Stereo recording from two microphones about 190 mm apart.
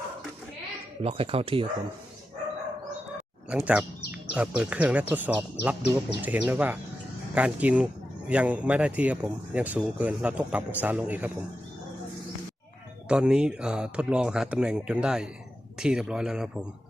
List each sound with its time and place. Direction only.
1.0 s speech: 30° right (ahead or behind)
3.5 s a man's voice: 5° right (ahead or behind)
13.1 s speech: 5° right (ahead or behind)